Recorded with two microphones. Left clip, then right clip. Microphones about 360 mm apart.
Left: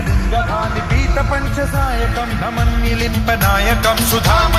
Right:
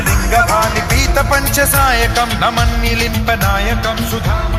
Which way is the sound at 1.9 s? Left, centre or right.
Right.